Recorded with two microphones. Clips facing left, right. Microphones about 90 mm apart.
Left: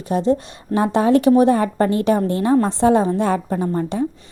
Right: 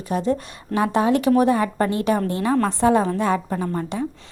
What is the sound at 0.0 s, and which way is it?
A woman's voice, 30° left (ahead or behind).